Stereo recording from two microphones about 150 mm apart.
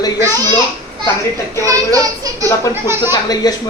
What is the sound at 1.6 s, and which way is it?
Speech, 20° right (ahead or behind).